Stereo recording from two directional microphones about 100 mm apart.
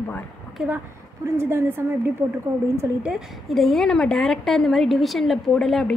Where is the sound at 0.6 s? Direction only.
10° right (ahead or behind).